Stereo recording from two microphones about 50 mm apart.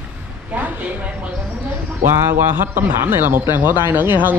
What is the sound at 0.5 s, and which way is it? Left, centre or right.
Speech, right.